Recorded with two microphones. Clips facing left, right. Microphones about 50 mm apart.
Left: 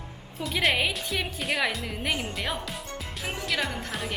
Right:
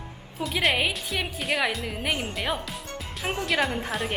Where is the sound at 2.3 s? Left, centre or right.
Centre.